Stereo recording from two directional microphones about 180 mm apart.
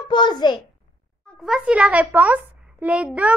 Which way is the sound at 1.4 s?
5° right (ahead or behind).